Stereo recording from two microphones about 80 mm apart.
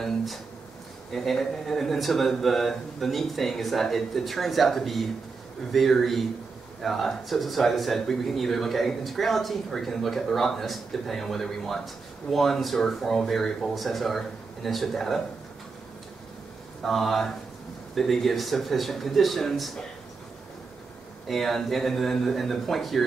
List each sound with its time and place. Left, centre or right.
0.0 s a sound: centre
1.1 s speech: centre
16.8 s speech: centre
21.3 s speech: centre